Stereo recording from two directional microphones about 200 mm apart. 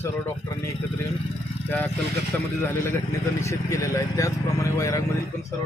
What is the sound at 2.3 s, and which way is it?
Speech, 5° left (ahead or behind).